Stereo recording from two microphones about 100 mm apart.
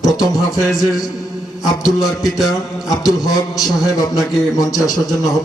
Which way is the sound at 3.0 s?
35° left (ahead or behind).